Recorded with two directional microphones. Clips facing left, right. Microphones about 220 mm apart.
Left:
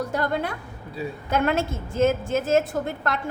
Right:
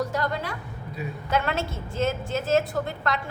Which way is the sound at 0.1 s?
55° left (ahead or behind).